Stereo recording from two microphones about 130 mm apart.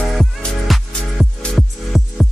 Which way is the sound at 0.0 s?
Centre (ahead or behind).